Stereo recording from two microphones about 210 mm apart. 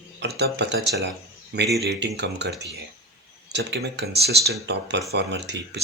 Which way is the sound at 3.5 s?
55° right (ahead or behind).